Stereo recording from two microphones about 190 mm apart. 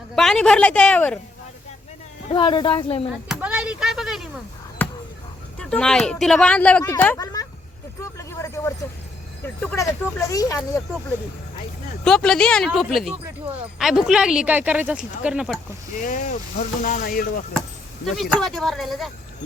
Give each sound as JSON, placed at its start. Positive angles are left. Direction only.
{"t": 0.2, "sound": "speech", "side_deg": 0}
{"t": 2.3, "sound": "speech", "side_deg": 25}
{"t": 3.2, "sound": "speech", "side_deg": -5}
{"t": 4.8, "sound": "chop", "side_deg": 10}
{"t": 5.5, "sound": "speech", "side_deg": 5}
{"t": 8.0, "sound": "a sound", "side_deg": 15}
{"t": 9.6, "sound": "speech", "side_deg": 10}
{"t": 12.0, "sound": "speech", "side_deg": 5}
{"t": 16.0, "sound": "speech", "side_deg": 40}
{"t": 18.0, "sound": "speech", "side_deg": 0}